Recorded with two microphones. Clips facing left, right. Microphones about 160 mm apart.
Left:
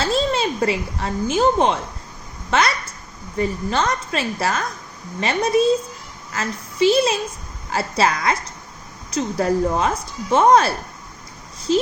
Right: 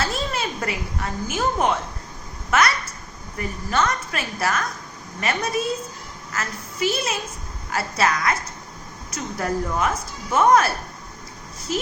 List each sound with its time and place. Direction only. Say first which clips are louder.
0.0 s a woman's voice: left 6 dB; 25° left (ahead or behind)
11.7 s a woman's voice: left 8 dB; 30° left (ahead or behind)